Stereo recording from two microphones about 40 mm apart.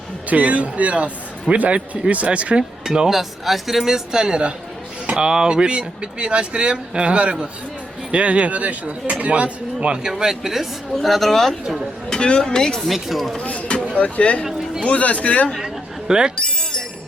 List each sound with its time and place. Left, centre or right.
0.3 s speech: right
2.8 s speech: right
3.1 s speech: centre
4.2 s speech: right
10.0 s speech: centre
12.0 s speech: centre
12.9 s speech: centre
13.4 s speech: left
14.4 s a sound: centre
14.8 s speech: left
15.6 s chatter: centre